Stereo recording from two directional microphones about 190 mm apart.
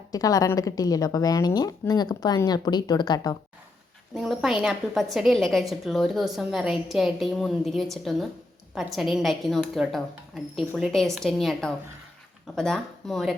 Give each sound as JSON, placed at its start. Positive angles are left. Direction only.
{"t": 0.1, "sound": "a woman's voice", "side_deg": 20}
{"t": 4.1, "sound": "a woman's voice", "side_deg": 0}